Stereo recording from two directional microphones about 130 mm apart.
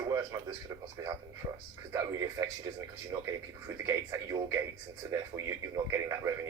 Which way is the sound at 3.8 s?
25° right (ahead or behind).